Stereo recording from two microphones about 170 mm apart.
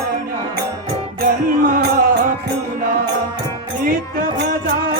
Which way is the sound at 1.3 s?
55° right (ahead or behind).